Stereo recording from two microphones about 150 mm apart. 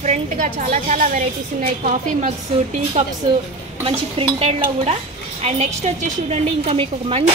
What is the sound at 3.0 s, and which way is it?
A woman's voice, 50° right (ahead or behind).